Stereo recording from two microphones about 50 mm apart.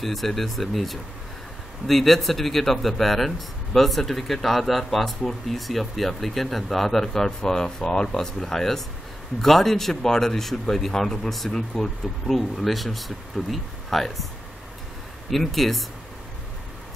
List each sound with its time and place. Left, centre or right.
0.0 s speech: centre
15.3 s speech: centre